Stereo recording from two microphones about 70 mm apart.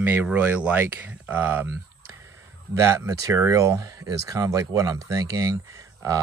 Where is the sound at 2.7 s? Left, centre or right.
Right.